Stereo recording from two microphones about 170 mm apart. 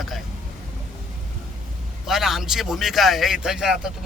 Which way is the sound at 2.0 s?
Centre (ahead or behind).